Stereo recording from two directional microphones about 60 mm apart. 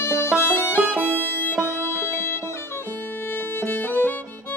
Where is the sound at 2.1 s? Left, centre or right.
Left.